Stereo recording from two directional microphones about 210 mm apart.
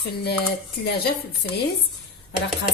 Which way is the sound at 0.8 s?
50° left (ahead or behind).